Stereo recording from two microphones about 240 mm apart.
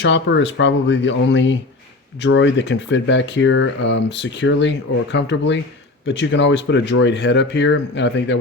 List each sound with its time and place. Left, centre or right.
0.0 s speech: left